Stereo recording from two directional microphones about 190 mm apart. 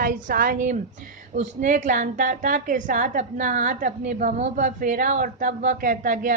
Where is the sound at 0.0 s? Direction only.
50° right (ahead or behind).